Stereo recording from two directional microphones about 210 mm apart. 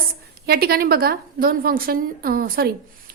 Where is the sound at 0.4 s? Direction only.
45° right (ahead or behind).